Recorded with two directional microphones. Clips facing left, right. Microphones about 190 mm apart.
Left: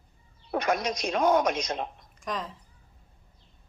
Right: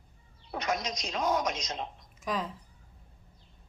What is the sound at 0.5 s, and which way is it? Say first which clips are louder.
A woman's voice: left 6 dB; 55° left (ahead or behind).